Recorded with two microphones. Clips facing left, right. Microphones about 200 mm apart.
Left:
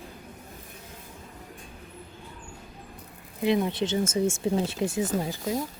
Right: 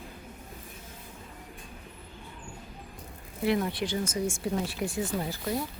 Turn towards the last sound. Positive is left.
turn(degrees=20)  # may be behind; listen again after turning